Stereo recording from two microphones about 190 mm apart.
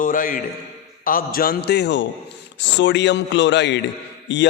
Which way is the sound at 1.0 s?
50° left (ahead or behind).